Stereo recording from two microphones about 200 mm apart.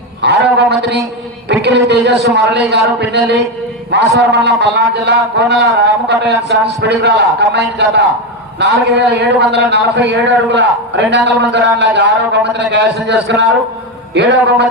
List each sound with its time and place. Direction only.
0.2 s a man's voice: 60° right (ahead or behind)